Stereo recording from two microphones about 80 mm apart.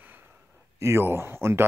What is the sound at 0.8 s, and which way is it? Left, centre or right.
Speech, right.